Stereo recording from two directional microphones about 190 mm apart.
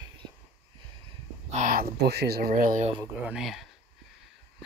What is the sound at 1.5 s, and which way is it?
Speech, 40° right (ahead or behind).